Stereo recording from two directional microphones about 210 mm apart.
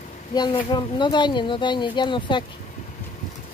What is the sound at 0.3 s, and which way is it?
Speech, 20° left (ahead or behind).